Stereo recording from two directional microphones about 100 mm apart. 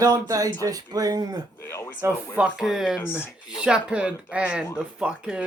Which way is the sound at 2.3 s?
10° right (ahead or behind).